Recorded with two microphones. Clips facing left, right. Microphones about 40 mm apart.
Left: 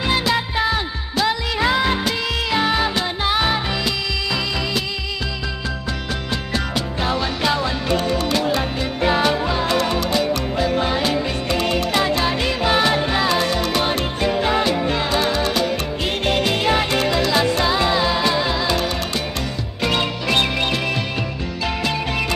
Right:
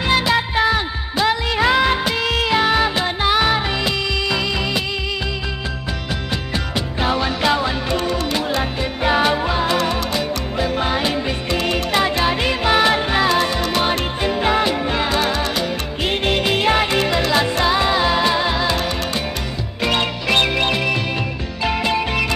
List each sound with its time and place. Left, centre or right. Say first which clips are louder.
0.0 s music: right 2 dB; centre
7.0 s music: right 3 dB; centre
19.9 s music: right 2 dB; centre